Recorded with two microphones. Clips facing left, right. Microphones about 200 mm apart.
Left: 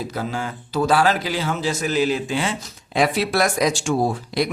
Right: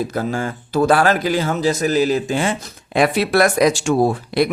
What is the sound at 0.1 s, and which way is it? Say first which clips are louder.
Speech: right 5 dB; 50° right (ahead or behind).